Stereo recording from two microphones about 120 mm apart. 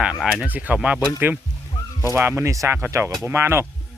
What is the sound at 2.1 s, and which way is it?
Speech, 20° right (ahead or behind).